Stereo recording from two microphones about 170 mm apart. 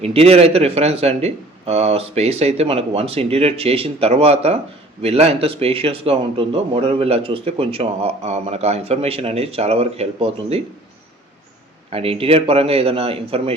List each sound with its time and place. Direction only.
0.0 s speech: 35° right (ahead or behind)
11.9 s speech: 35° right (ahead or behind)